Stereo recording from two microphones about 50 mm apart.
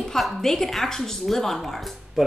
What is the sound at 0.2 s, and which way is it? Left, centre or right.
A woman's voice, centre.